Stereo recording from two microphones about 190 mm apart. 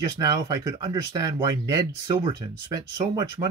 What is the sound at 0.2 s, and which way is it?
Speech, 20° right (ahead or behind).